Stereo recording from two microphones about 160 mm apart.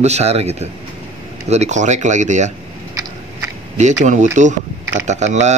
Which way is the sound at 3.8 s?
50° right (ahead or behind).